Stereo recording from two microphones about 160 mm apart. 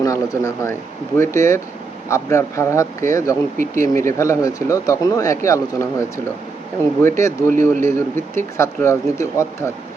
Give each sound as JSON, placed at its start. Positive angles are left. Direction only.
{"t": 0.0, "sound": "speech", "side_deg": 20}